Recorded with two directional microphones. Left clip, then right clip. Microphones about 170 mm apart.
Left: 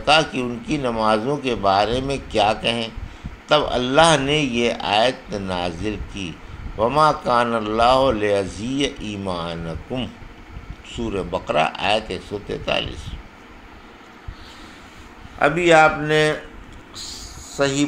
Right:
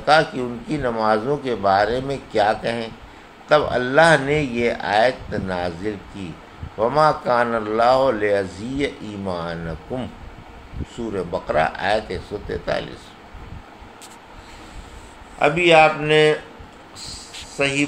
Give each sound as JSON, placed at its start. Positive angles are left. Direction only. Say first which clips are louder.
{"t": 0.0, "sound": "a man's voice", "louder": "right 1 dB", "side_deg": 15}
{"t": 15.3, "sound": "speech", "louder": "even", "side_deg": 35}